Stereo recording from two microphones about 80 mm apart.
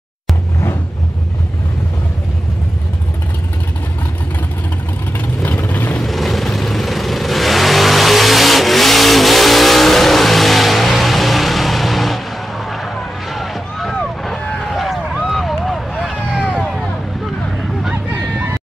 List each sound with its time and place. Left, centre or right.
5.7 s vehicle: left
6.0 s vehicle: centre